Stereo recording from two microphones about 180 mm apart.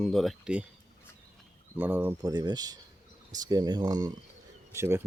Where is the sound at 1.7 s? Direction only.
10° right (ahead or behind).